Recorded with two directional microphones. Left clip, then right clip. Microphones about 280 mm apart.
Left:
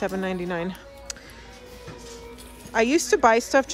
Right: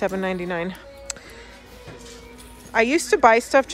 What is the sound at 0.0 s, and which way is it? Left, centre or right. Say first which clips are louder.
Speech: right 3 dB; centre.